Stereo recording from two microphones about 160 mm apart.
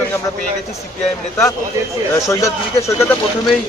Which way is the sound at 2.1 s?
20° left (ahead or behind).